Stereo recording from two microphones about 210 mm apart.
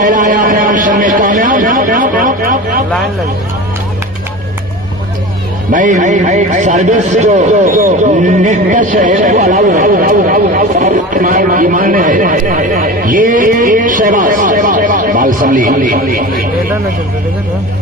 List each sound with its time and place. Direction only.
0.0 s a man's voice: 40° right (ahead or behind)
5.7 s a man's voice: 35° right (ahead or behind)